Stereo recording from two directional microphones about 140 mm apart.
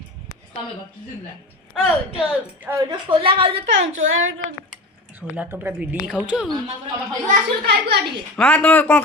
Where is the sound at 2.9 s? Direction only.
40° right (ahead or behind).